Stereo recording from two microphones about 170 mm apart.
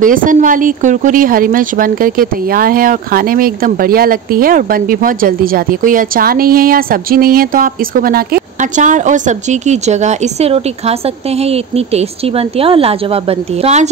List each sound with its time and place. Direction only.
0.0 s speech: 55° right (ahead or behind)